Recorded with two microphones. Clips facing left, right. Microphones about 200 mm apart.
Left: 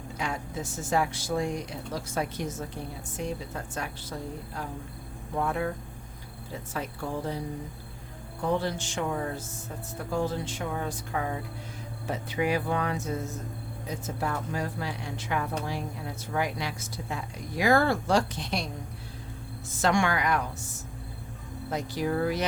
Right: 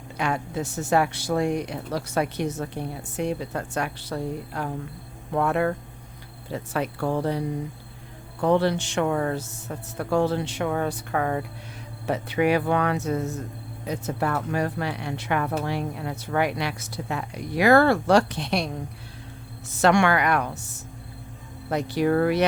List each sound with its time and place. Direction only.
0.2 s speech: 65° right (ahead or behind)
19.7 s speech: 70° right (ahead or behind)